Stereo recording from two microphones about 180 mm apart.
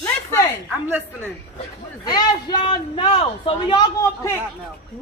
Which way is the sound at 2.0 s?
25° left (ahead or behind).